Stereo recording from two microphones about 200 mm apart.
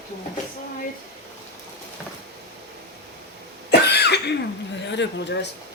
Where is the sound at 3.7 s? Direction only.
55° left (ahead or behind).